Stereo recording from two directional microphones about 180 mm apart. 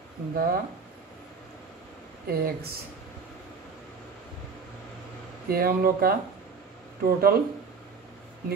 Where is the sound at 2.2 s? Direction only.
60° right (ahead or behind).